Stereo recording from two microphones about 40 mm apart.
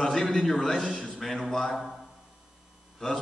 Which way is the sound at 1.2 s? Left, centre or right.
Centre.